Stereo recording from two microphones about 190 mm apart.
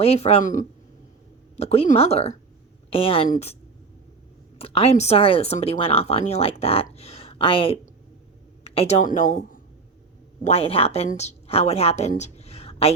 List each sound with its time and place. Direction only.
0.0 s a woman's voice: 30° left (ahead or behind)